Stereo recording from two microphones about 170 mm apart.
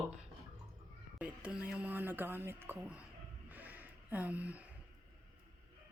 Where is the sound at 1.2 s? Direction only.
5° right (ahead or behind).